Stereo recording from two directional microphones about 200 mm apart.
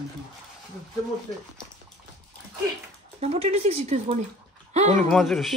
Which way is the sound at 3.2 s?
30° right (ahead or behind).